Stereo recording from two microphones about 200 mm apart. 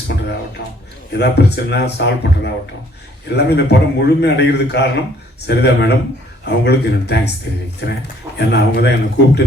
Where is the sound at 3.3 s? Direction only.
55° left (ahead or behind).